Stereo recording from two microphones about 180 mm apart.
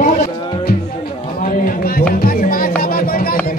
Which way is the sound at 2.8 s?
55° left (ahead or behind).